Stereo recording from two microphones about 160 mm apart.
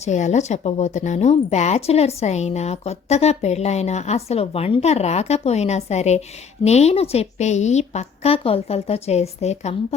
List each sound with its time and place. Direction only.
0.0 s a woman's voice: 45° left (ahead or behind)